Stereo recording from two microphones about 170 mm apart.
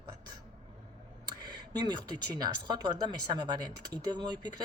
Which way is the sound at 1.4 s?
25° right (ahead or behind).